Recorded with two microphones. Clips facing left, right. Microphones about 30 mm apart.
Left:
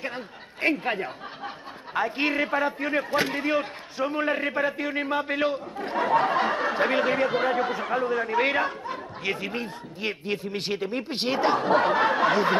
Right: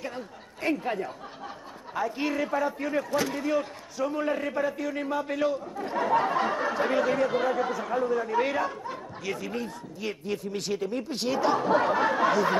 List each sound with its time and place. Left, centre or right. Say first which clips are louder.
0.0 s a man's voice: left 3 dB; left
5.9 s speech: left 2 dB; left